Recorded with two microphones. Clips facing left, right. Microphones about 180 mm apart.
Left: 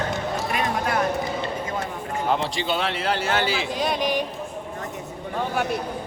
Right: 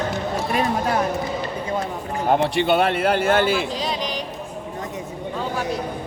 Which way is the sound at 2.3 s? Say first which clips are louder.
Right 7 dB; 60° right (ahead or behind).